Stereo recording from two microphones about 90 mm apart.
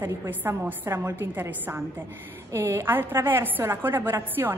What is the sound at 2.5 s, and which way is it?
A woman's voice, 35° right (ahead or behind).